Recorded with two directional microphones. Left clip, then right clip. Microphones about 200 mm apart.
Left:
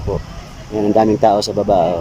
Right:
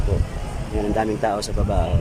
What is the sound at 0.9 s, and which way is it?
Speech, 20° left (ahead or behind).